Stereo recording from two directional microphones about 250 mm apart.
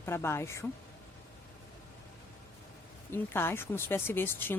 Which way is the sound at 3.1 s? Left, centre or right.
Centre.